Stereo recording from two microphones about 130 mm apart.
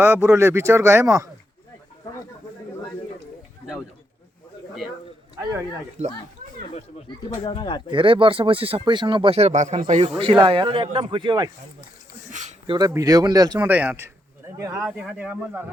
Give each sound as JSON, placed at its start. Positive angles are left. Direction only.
{"t": 0.0, "sound": "speech", "side_deg": -20}
{"t": 5.4, "sound": "speech", "side_deg": -25}
{"t": 7.3, "sound": "speech", "side_deg": 40}
{"t": 7.9, "sound": "speech", "side_deg": -40}
{"t": 10.4, "sound": "speech", "side_deg": -45}
{"t": 12.3, "sound": "a sound", "side_deg": -65}
{"t": 12.6, "sound": "speech", "side_deg": -35}
{"t": 13.6, "sound": "speech", "side_deg": -15}
{"t": 14.8, "sound": "speech", "side_deg": -10}